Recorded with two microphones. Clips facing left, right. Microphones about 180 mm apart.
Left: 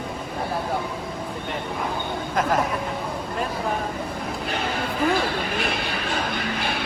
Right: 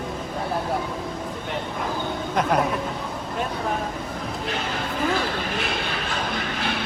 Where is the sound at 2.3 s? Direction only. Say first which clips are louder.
Right 1 dB; centre (ahead or behind).